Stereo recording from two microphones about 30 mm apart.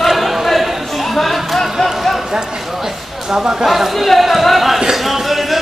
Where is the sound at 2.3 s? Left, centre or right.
Right.